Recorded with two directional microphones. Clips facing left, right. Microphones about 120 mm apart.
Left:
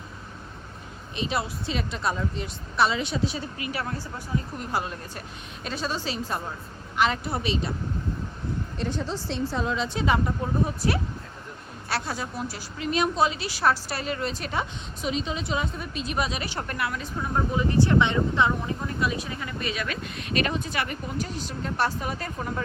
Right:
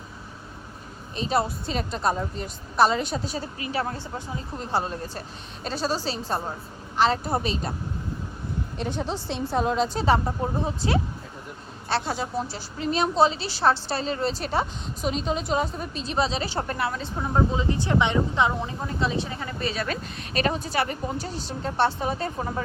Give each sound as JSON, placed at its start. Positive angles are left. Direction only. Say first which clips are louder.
{"t": 1.1, "sound": "a woman's voice", "louder": "right 4 dB", "side_deg": -40}
{"t": 8.8, "sound": "a woman's voice", "louder": "right 2 dB", "side_deg": -60}